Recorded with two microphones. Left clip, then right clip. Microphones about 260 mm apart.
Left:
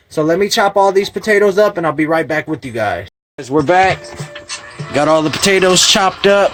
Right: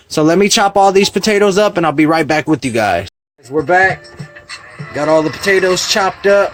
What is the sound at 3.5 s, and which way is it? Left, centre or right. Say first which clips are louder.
Speech: left 1 dB; left.